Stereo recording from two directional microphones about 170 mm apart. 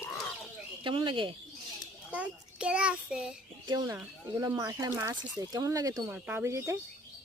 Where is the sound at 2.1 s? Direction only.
5° right (ahead or behind).